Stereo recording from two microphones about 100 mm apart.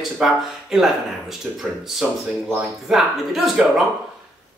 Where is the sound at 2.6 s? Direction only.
5° right (ahead or behind).